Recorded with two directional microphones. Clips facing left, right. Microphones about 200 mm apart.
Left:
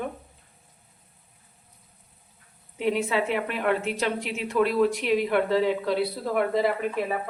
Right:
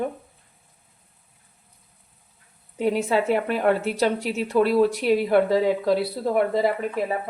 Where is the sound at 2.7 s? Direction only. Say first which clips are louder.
Right 3 dB; 40° right (ahead or behind).